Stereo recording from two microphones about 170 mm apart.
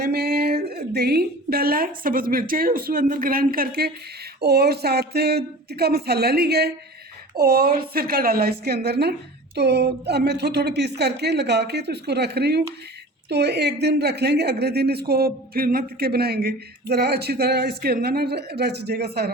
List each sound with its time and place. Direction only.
0.0 s a woman's voice: 65° right (ahead or behind)